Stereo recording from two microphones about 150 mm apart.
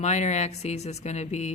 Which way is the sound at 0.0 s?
50° left (ahead or behind).